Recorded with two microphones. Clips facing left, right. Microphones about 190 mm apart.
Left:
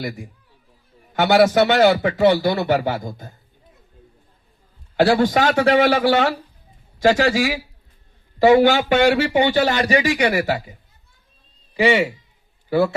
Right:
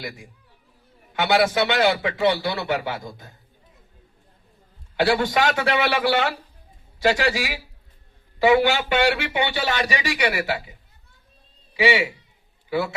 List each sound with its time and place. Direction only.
0.0 s a man's voice: 45° left (ahead or behind)
4.9 s a man's voice: 40° left (ahead or behind)